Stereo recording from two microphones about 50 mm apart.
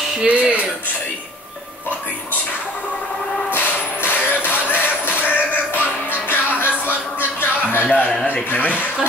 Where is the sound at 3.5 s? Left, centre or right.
Left.